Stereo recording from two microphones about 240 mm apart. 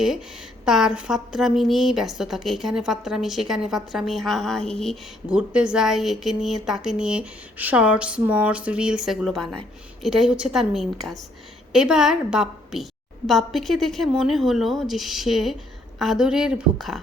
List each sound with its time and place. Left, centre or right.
0.6 s a woman's voice: centre